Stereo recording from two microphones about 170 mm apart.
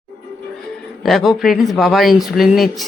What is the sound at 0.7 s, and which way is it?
Speech, centre (ahead or behind).